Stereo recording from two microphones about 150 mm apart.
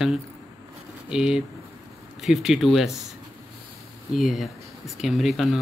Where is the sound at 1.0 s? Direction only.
5° right (ahead or behind).